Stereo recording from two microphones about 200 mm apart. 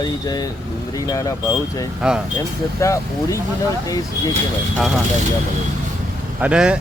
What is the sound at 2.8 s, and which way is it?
Speech, 15° left (ahead or behind).